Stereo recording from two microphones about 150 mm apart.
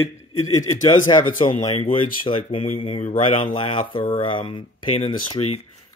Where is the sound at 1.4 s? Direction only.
30° left (ahead or behind).